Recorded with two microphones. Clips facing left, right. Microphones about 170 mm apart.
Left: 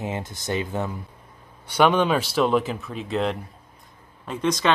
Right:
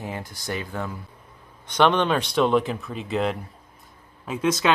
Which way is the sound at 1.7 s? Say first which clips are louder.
Left 1 dB; 10° left (ahead or behind).